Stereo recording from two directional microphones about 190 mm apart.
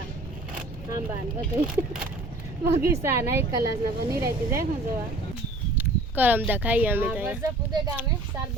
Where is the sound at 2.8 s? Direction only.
15° right (ahead or behind).